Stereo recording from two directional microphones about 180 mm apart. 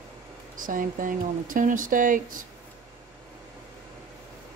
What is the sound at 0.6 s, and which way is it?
Speech, 50° right (ahead or behind).